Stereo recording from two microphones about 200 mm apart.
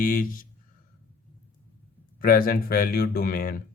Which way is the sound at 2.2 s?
45° left (ahead or behind).